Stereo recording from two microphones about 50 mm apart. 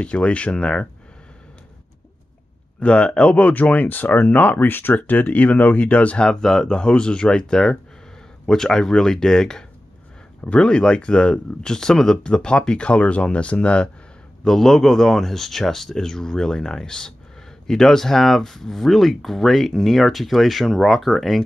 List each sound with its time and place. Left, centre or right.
0.0 s speech: left
2.8 s speech: left
6.2 s speech: centre
14.4 s speech: centre